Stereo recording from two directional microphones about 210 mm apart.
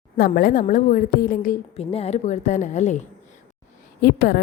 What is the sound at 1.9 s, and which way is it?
A woman's voice, 30° left (ahead or behind).